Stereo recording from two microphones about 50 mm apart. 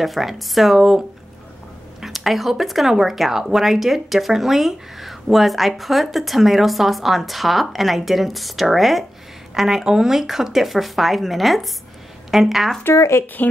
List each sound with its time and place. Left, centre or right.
0.0 s speech: centre
12.9 s speech: left